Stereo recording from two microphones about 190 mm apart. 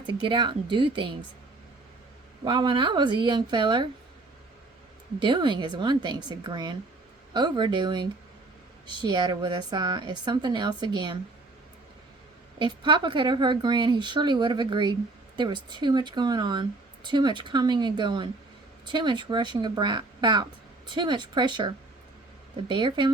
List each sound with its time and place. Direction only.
0.0 s speech: 25° right (ahead or behind)
2.4 s speech: 25° right (ahead or behind)
5.2 s speech: 25° right (ahead or behind)
12.5 s speech: 25° right (ahead or behind)
22.7 s speech: 25° right (ahead or behind)